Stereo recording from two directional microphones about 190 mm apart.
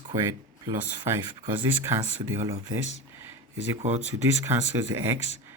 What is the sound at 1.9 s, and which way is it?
Speech, 15° right (ahead or behind).